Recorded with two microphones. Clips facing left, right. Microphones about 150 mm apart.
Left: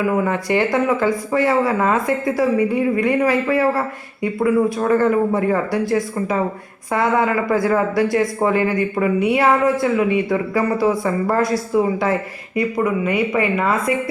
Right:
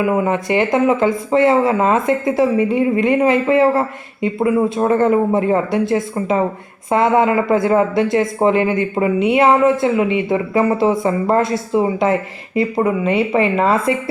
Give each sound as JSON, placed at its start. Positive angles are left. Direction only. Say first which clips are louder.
{"t": 0.0, "sound": "speech", "louder": "right 2 dB", "side_deg": -20}